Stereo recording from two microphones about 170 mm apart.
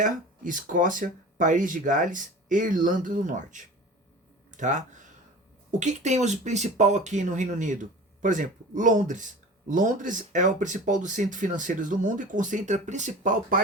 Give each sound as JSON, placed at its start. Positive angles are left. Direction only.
{"t": 0.0, "sound": "speech", "side_deg": -50}